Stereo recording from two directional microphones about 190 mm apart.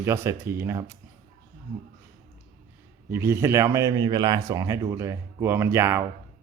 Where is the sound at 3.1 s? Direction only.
15° right (ahead or behind).